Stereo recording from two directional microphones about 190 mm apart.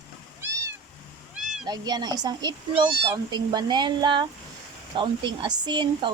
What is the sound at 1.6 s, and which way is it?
Speech, 20° right (ahead or behind).